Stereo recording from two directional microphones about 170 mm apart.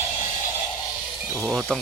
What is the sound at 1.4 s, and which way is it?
Speech, centre (ahead or behind).